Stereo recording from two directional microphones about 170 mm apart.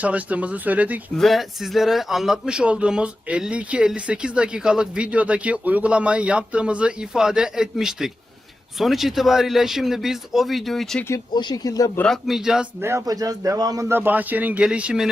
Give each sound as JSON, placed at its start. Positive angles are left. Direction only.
{"t": 0.0, "sound": "speech", "side_deg": -10}
{"t": 1.1, "sound": "speech", "side_deg": 0}
{"t": 11.1, "sound": "speech", "side_deg": 25}
{"t": 11.9, "sound": "speech", "side_deg": 5}
{"t": 12.8, "sound": "speech", "side_deg": -20}